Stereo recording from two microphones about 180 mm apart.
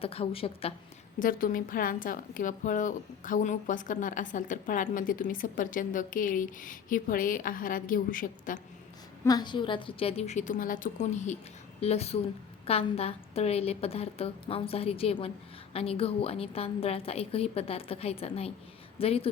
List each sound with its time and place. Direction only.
0.0 s a woman's voice: 30° left (ahead or behind)
1.2 s a woman's voice: 50° left (ahead or behind)
9.2 s a woman's voice: 20° left (ahead or behind)